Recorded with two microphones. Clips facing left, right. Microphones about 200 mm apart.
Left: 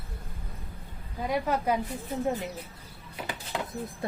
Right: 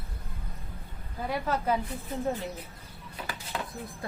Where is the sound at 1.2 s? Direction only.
15° left (ahead or behind).